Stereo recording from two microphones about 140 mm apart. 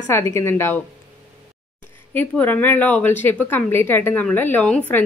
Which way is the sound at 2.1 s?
15° left (ahead or behind).